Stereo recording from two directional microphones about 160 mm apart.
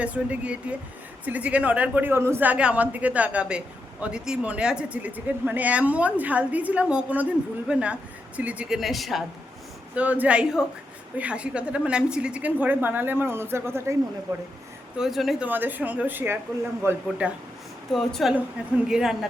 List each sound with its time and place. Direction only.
0.0 s speech: 10° right (ahead or behind); by 14.4 s 25° right (ahead or behind)
14.9 s speech: centre (ahead or behind)
17.9 s speech: centre (ahead or behind)